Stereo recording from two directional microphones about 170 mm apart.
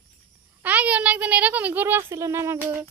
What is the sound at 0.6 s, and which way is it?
A child's voice, 10° right (ahead or behind).